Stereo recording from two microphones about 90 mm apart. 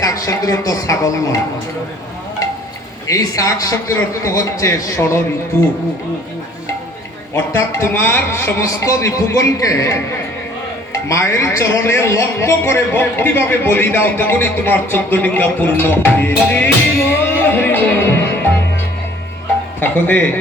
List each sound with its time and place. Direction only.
0.0 s speech: 40° left (ahead or behind)
3.1 s a man's voice: 40° left (ahead or behind)
7.3 s a man's voice: 30° left (ahead or behind)
11.1 s a man's voice: 30° left (ahead or behind)
19.8 s a man's voice: 20° left (ahead or behind)